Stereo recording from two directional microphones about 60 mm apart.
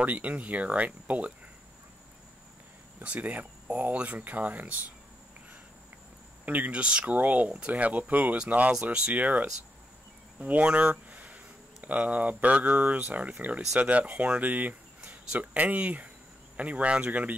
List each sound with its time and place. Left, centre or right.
0.0 s speech: right
3.0 s speech: right
6.4 s speech: right